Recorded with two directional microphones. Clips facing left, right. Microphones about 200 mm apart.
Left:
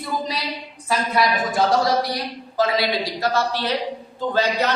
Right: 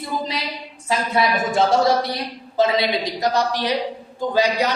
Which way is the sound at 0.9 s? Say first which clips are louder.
Right 1 dB; 25° right (ahead or behind).